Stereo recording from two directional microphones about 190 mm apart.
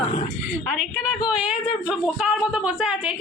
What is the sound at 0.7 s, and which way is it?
A woman's voice, 5° right (ahead or behind).